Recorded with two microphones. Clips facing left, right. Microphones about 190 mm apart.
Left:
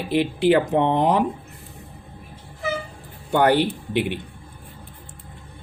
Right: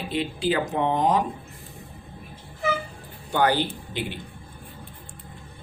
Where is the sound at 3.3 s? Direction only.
60° left (ahead or behind).